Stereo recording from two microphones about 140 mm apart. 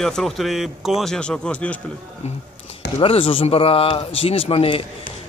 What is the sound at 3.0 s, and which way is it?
Speech, 40° left (ahead or behind).